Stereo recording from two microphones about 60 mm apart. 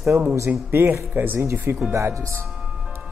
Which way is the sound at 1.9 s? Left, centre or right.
Right.